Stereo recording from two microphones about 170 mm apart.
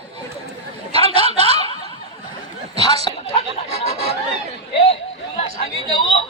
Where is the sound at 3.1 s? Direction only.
25° left (ahead or behind).